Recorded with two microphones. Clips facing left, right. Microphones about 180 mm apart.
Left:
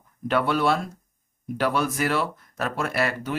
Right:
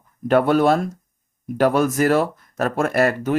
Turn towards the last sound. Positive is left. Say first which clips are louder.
# right 7 dB
turn(degrees=-45)  # may be behind; listen again after turning